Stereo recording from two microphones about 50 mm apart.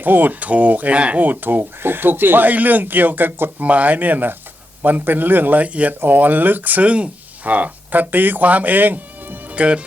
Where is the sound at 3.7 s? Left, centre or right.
Right.